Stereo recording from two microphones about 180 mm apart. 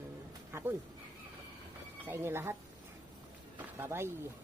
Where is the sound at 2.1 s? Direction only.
15° right (ahead or behind).